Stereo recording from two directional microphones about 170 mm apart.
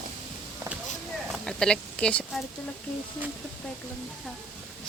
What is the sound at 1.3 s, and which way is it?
Speech, 5° left (ahead or behind).